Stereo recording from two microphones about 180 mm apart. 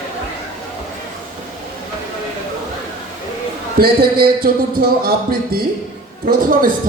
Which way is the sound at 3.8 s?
55° right (ahead or behind).